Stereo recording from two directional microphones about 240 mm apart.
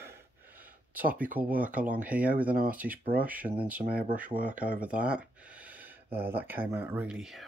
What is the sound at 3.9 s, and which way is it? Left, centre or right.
Speech, right.